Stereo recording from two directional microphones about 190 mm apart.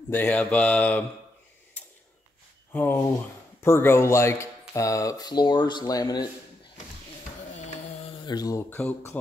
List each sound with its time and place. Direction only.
0.1 s speech: 10° left (ahead or behind)
2.7 s speech: 10° left (ahead or behind)
8.2 s speech: 20° left (ahead or behind)